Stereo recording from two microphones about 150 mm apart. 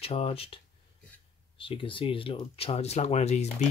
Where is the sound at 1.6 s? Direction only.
35° left (ahead or behind).